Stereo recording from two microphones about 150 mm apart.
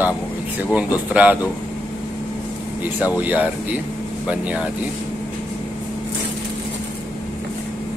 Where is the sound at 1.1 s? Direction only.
10° right (ahead or behind).